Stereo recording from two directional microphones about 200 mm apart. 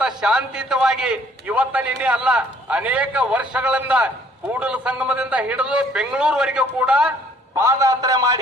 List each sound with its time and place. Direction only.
0.0 s a man's voice: 5° right (ahead or behind)